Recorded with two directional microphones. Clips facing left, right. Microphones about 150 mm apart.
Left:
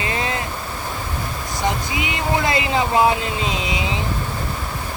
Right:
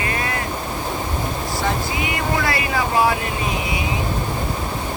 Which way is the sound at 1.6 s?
20° left (ahead or behind).